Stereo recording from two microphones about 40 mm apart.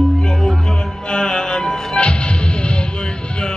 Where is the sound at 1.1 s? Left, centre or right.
Left.